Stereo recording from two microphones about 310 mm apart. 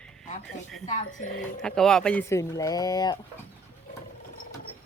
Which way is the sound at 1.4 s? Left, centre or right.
Centre.